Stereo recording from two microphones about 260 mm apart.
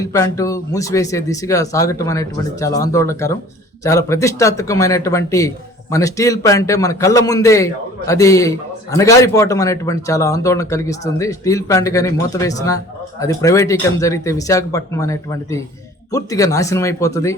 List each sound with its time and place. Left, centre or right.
0.0 s a man's voice: centre